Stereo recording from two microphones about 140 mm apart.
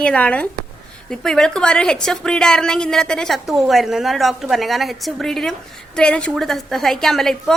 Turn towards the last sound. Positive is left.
turn(degrees=0)  # may be behind; listen again after turning